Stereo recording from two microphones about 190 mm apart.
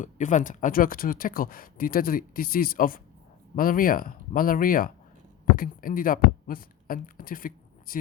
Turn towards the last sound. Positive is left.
turn(degrees=50)  # may be behind; listen again after turning